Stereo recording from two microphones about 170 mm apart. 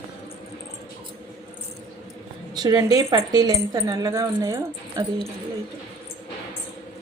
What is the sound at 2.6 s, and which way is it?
Speech, 25° right (ahead or behind).